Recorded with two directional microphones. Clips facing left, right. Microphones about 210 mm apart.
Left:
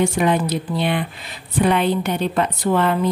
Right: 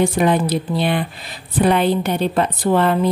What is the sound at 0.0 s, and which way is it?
A woman's voice, 35° right (ahead or behind).